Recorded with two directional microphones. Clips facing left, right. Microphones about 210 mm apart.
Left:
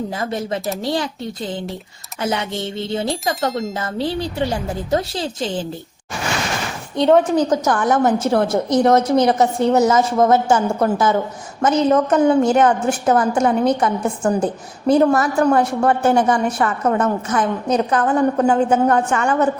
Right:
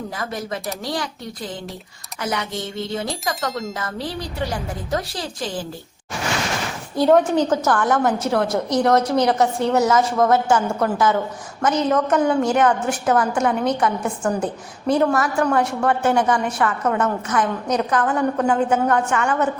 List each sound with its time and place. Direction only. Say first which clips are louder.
0.2 s a woman's voice: left 4 dB; 25° left (ahead or behind)
3.8 s a woman's voice: left 6 dB; 25° left (ahead or behind)
6.9 s a woman's voice: left 1 dB; 5° right (ahead or behind)
7.3 s a woman's voice: left 2 dB; 15° left (ahead or behind); by 19.5 s 35° left (ahead or behind)